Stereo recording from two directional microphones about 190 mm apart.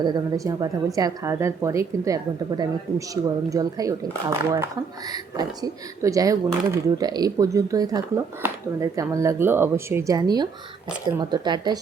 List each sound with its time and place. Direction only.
0.0 s speech: 20° right (ahead or behind)